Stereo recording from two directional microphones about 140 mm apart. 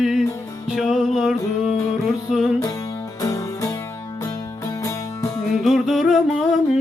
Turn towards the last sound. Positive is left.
turn(degrees=0)  # may be behind; listen again after turning